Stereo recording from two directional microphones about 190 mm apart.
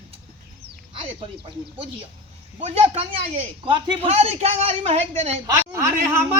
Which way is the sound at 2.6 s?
35° right (ahead or behind).